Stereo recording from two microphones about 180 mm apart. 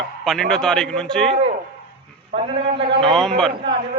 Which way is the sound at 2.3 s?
30° right (ahead or behind).